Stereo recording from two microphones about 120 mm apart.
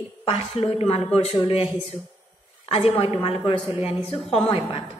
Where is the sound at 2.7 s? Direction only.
55° left (ahead or behind).